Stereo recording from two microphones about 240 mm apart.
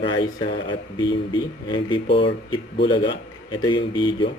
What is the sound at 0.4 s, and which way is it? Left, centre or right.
Speech, centre.